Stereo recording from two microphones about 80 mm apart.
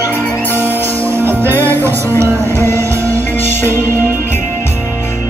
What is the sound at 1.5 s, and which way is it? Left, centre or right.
Music, left.